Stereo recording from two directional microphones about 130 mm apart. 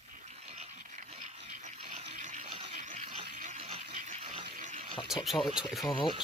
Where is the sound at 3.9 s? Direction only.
70° right (ahead or behind); by 4.5 s 50° right (ahead or behind).